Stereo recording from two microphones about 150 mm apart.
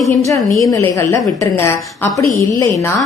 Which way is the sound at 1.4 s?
15° left (ahead or behind).